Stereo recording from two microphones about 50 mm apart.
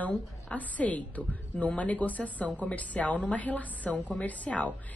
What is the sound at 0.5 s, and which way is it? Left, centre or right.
Speech, left.